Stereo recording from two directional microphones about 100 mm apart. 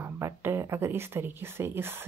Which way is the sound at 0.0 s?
25° right (ahead or behind).